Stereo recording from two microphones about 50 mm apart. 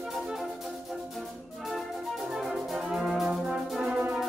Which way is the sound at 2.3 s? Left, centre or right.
Centre.